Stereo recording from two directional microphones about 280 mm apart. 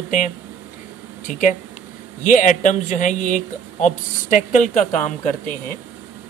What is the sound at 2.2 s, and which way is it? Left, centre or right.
Speech, left.